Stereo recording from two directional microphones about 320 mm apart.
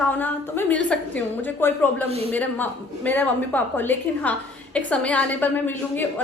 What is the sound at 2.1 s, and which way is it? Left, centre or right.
Speech, centre.